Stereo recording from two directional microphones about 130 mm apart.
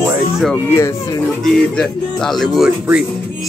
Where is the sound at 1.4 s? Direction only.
5° left (ahead or behind).